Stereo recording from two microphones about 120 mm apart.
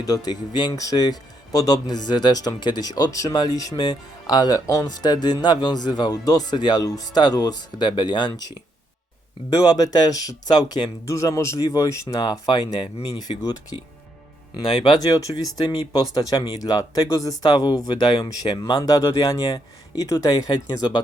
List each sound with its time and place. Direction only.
0.0 s speech: 30° left (ahead or behind)
9.7 s speech: 35° left (ahead or behind)
14.6 s speech: 35° left (ahead or behind)